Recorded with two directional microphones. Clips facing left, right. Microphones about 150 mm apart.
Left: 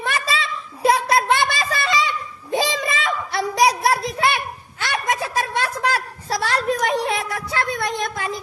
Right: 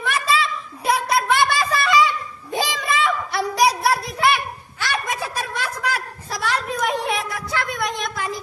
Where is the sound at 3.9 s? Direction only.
25° left (ahead or behind).